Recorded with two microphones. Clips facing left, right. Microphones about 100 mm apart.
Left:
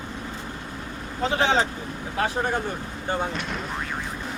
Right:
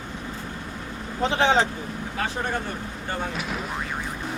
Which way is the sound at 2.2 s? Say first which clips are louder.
Left 4 dB; 10° left (ahead or behind).